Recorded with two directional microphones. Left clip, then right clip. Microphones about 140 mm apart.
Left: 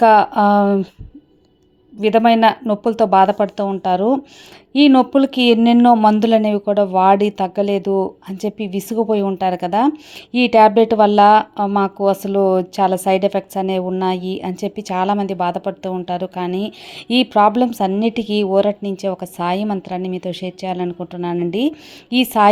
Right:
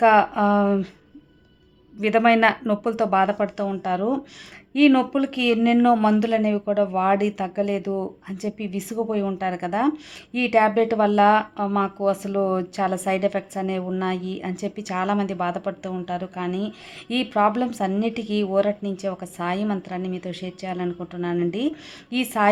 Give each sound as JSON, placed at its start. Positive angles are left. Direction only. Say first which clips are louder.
{"t": 0.0, "sound": "speech", "louder": "left 6 dB", "side_deg": 30}
{"t": 2.0, "sound": "speech", "louder": "left 5 dB", "side_deg": 25}